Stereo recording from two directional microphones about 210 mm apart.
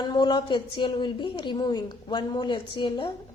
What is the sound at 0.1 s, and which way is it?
A woman's voice, 20° left (ahead or behind).